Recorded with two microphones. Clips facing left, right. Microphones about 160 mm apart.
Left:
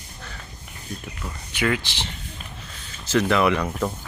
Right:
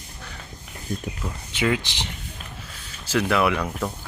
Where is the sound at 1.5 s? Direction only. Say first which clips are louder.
Even; 20° right (ahead or behind); by 3.9 s centre (ahead or behind).